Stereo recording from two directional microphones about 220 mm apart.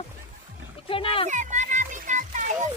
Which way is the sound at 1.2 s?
35° right (ahead or behind).